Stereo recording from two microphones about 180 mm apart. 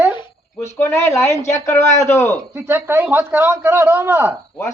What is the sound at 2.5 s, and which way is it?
A man's voice, 10° right (ahead or behind).